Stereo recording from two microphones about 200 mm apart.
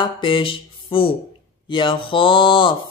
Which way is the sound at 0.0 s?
25° left (ahead or behind).